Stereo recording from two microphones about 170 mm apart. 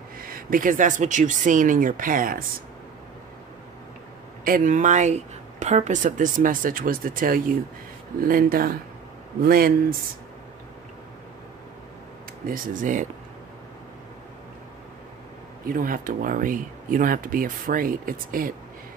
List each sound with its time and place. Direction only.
0.2 s speech: 55° right (ahead or behind)
4.5 s speech: 50° right (ahead or behind)
12.4 s speech: 55° right (ahead or behind)
15.6 s speech: 55° right (ahead or behind)